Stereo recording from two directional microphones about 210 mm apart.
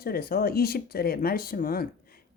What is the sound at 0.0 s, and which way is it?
A woman's voice, 45° left (ahead or behind).